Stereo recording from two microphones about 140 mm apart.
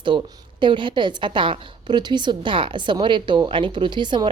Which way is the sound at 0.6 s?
35° right (ahead or behind).